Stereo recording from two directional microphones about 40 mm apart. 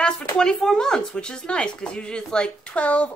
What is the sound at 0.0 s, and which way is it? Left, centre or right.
A man's voice, centre.